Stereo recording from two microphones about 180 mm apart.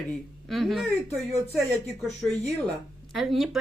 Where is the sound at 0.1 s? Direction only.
Centre (ahead or behind).